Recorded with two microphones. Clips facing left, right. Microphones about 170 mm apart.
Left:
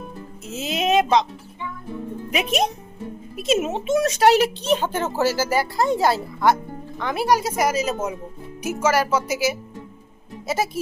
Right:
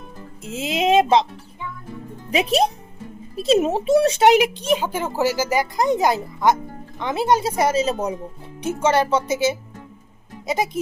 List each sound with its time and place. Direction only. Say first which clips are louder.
0.5 s speech: right 3 dB; 25° right (ahead or behind)
2.3 s a child's voice: right 4 dB; 35° right (ahead or behind)
4.3 s a woman's voice: right 1 dB; 10° right (ahead or behind)